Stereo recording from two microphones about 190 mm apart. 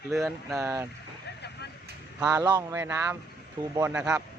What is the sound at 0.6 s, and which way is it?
Speech, 15° right (ahead or behind).